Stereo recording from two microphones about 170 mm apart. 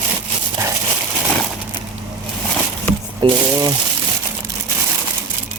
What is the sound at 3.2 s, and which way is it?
Speech, 25° right (ahead or behind).